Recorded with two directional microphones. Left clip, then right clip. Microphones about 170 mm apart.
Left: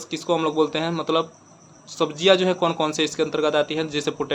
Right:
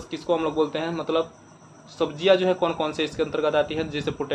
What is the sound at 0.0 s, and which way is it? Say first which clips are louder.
A man's voice: left 2 dB; 35° left (ahead or behind).